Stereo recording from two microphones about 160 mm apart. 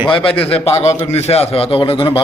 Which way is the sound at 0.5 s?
40° left (ahead or behind).